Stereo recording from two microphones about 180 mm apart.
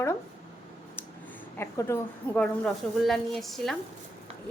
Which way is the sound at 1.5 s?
15° left (ahead or behind).